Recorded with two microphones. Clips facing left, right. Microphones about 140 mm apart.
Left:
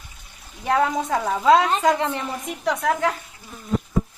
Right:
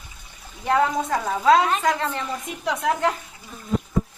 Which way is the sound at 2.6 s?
5° right (ahead or behind).